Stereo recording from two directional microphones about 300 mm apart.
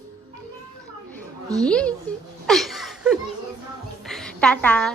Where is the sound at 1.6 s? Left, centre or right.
Centre.